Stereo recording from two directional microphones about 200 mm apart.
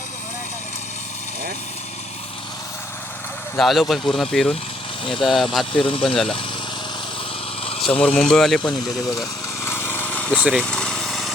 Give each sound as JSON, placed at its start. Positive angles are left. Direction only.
{"t": 3.6, "sound": "speech", "side_deg": 0}
{"t": 5.7, "sound": "speech", "side_deg": 25}
{"t": 8.0, "sound": "speech", "side_deg": 5}
{"t": 9.6, "sound": "lawn mower", "side_deg": 10}
{"t": 10.3, "sound": "vehicle", "side_deg": -5}